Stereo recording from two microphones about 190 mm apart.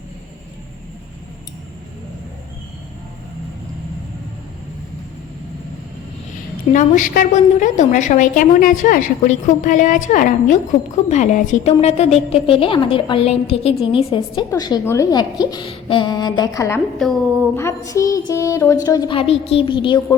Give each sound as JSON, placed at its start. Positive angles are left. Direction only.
{"t": 6.7, "sound": "a woman's voice", "side_deg": 45}
{"t": 17.0, "sound": "speech", "side_deg": 0}
{"t": 17.6, "sound": "a woman's voice", "side_deg": 15}